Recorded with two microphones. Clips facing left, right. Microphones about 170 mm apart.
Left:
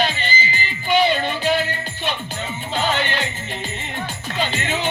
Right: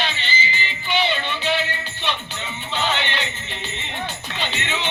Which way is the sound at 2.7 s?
45° left (ahead or behind).